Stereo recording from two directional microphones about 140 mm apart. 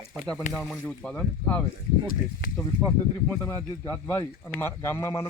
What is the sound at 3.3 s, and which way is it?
Speech, 15° left (ahead or behind).